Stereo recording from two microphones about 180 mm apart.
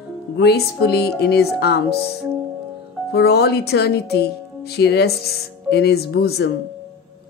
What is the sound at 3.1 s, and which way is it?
Speech, 65° left (ahead or behind).